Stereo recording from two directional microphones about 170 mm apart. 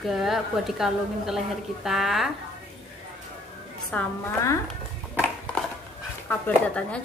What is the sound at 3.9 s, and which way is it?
Speech, 15° left (ahead or behind).